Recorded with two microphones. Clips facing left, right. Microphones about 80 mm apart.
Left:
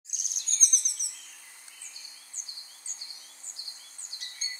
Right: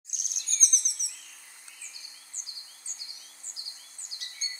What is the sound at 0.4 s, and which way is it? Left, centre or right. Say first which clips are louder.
Bird vocalization: right 1 dB; left.